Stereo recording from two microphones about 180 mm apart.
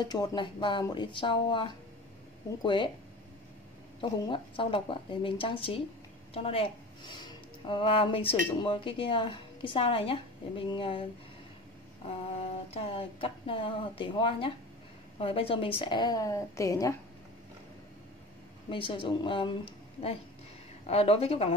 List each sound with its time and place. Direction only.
0.0 s speech: 20° left (ahead or behind)
4.0 s a woman's voice: 25° left (ahead or behind)
12.4 s speech: 35° left (ahead or behind); by 16.9 s 20° left (ahead or behind)
18.7 s speech: 25° left (ahead or behind)